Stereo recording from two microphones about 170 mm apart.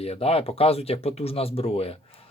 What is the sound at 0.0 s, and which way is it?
Speech, 35° left (ahead or behind).